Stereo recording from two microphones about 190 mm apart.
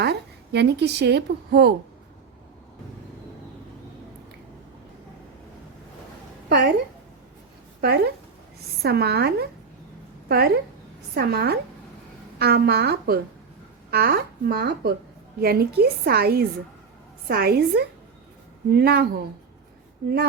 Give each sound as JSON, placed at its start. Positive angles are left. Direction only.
{"t": 0.0, "sound": "a woman's voice", "side_deg": -60}
{"t": 6.5, "sound": "a woman's voice", "side_deg": -60}
{"t": 7.8, "sound": "a woman's voice", "side_deg": -55}